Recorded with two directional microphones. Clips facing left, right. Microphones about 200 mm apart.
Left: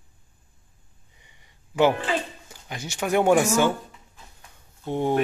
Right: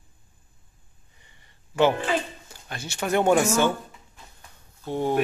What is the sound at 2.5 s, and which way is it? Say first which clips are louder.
Speech: left 1 dB; 15° left (ahead or behind).